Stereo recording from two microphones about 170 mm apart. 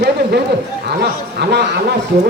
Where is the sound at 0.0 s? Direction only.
75° right (ahead or behind).